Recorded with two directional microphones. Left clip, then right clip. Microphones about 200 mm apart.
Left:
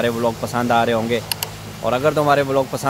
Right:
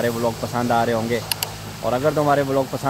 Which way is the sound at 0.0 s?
10° left (ahead or behind).